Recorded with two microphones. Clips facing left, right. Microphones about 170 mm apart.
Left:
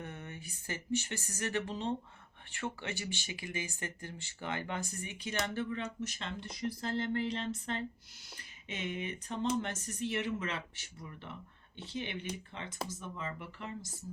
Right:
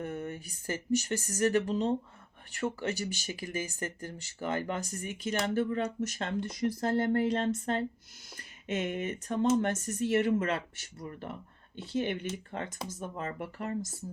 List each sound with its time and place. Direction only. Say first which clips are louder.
0.0 s speech: right 8 dB; 40° right (ahead or behind)
12.5 s speech: right 4 dB; 45° right (ahead or behind)